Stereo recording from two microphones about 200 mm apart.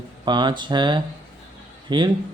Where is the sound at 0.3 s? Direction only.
20° right (ahead or behind).